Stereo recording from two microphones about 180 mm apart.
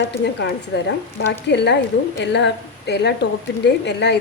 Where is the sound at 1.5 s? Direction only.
75° left (ahead or behind).